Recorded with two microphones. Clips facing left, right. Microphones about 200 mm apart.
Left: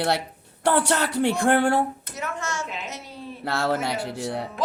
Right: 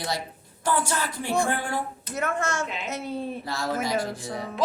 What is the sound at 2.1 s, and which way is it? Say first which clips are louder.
A woman's voice: right 6 dB; 55° right (ahead or behind).